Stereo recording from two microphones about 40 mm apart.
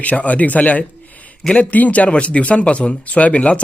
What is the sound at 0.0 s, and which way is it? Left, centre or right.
A man's voice, left.